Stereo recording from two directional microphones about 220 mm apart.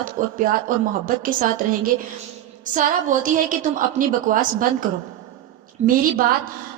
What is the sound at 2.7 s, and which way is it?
A woman's voice, 35° right (ahead or behind).